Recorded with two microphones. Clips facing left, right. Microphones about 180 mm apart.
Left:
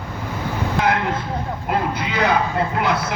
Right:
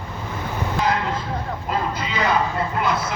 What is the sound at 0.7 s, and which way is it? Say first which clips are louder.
Vehicle: left 2 dB; 60° left (ahead or behind).